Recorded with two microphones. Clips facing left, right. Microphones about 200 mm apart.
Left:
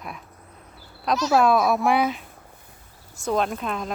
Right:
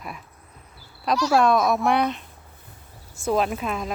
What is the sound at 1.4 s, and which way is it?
Speech, 5° left (ahead or behind).